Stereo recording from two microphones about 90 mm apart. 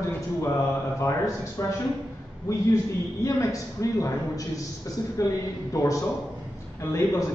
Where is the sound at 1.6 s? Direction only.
35° left (ahead or behind).